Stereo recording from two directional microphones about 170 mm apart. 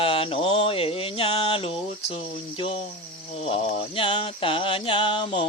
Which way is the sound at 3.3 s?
35° left (ahead or behind).